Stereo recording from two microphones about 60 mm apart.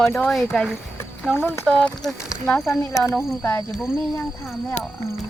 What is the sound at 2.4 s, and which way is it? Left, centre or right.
Speech, left.